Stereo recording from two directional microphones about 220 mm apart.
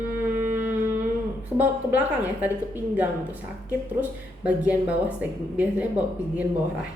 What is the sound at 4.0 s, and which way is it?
A woman's voice, 5° right (ahead or behind).